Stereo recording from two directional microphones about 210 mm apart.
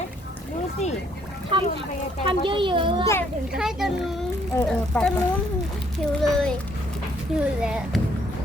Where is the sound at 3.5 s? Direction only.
5° right (ahead or behind).